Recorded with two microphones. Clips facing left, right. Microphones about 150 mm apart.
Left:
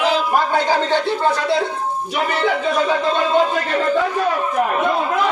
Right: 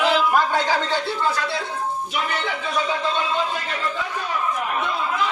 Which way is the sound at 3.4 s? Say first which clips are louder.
Left 8 dB; 50° left (ahead or behind).